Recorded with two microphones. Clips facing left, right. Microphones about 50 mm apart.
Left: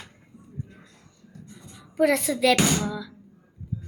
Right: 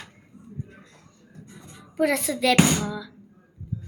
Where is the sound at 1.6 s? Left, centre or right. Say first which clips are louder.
Right 1 dB; right.